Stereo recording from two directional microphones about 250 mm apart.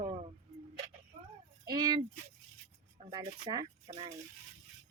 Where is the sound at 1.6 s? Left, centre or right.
Centre.